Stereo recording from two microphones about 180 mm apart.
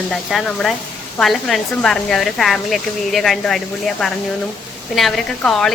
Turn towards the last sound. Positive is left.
turn(degrees=5)  # may be behind; listen again after turning